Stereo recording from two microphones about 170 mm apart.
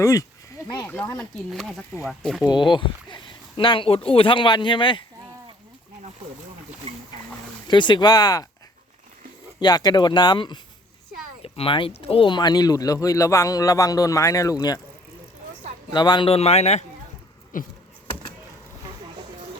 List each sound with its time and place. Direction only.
0.0 s speech: 20° left (ahead or behind); by 2.5 s centre (ahead or behind)
2.5 s speech: 30° left (ahead or behind)
7.7 s speech: 25° left (ahead or behind)
9.6 s speech: 25° left (ahead or behind)
15.9 s speech: 25° left (ahead or behind)
17.5 s a sound: 55° left (ahead or behind)